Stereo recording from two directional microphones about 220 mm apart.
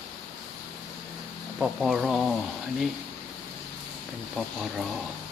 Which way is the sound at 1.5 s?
Centre (ahead or behind).